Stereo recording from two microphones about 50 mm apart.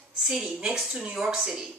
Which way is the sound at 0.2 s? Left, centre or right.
Centre.